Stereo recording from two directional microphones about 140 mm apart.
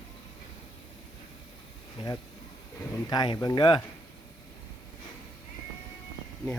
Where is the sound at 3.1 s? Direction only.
30° left (ahead or behind).